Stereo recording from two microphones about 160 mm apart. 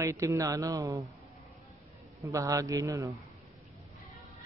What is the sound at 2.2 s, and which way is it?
Speech, 20° right (ahead or behind).